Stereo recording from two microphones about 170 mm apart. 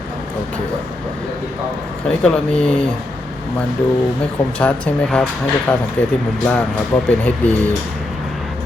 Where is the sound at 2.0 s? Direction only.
5° left (ahead or behind).